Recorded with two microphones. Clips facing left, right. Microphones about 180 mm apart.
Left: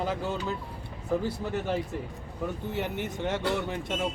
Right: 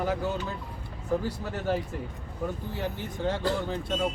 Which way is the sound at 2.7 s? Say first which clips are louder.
Left 2 dB; 20° left (ahead or behind).